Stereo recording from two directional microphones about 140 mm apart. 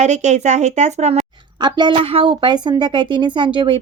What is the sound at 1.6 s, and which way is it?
Speech, 35° right (ahead or behind).